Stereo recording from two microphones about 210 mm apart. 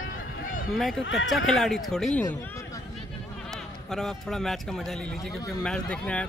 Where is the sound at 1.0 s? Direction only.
65° left (ahead or behind).